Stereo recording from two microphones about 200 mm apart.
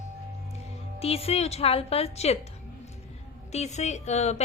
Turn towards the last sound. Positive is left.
turn(degrees=35)  # may be behind; listen again after turning